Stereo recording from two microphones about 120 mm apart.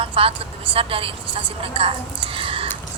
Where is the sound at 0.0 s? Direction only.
50° right (ahead or behind).